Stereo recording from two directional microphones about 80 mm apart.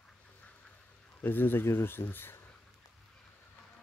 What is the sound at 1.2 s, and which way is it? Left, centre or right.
Speech, left.